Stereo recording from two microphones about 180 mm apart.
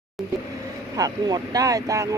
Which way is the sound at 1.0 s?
20° right (ahead or behind).